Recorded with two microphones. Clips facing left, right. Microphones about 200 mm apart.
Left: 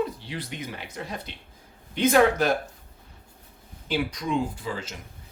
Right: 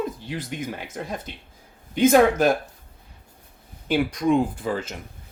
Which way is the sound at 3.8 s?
50° right (ahead or behind).